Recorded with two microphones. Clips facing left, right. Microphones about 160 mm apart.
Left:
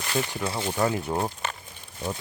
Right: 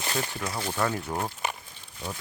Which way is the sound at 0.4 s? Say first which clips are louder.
Left 2 dB; 25° left (ahead or behind).